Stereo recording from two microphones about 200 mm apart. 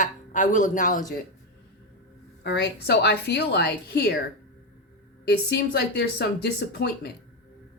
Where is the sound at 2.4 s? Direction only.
55° left (ahead or behind).